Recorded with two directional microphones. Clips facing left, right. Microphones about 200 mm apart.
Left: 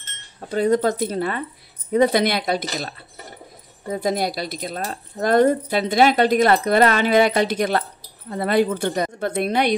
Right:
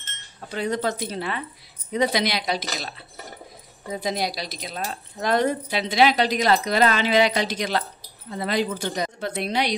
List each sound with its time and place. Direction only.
0.5 s speech: 50° left (ahead or behind)
3.9 s speech: 50° left (ahead or behind)